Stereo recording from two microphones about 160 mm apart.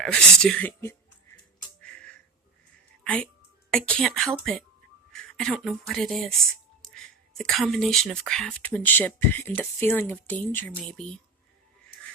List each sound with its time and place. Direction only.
0.0 s speech: 5° left (ahead or behind)
1.8 s music: 5° left (ahead or behind)
3.7 s speech: 5° left (ahead or behind)
5.1 s a sound: 5° left (ahead or behind)
5.6 s speech: centre (ahead or behind)